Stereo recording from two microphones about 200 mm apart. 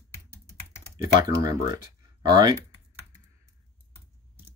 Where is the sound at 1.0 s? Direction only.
15° right (ahead or behind).